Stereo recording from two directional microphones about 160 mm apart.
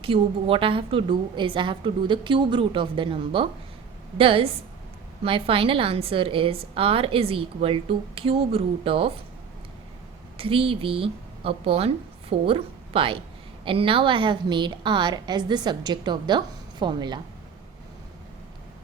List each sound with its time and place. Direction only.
0.0 s a woman's voice: 35° right (ahead or behind)
10.3 s a woman's voice: 35° right (ahead or behind)